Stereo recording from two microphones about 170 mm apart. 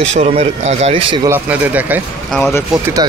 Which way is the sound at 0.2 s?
35° right (ahead or behind).